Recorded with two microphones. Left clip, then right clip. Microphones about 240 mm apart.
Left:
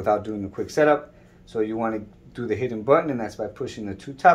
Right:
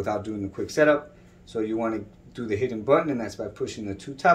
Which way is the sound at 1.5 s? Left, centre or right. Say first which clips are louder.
Left 2 dB; centre.